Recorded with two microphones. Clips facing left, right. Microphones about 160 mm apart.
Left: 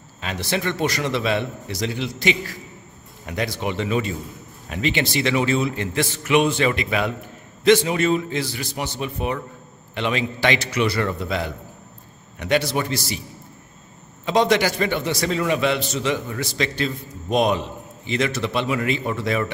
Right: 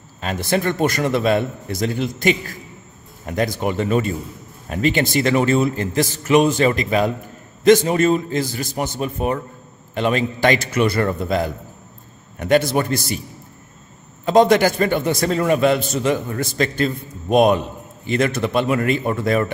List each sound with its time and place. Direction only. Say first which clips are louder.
0.2 s a man's voice: right 5 dB; 45° right (ahead or behind)
14.2 s a man's voice: right 5 dB; 50° right (ahead or behind)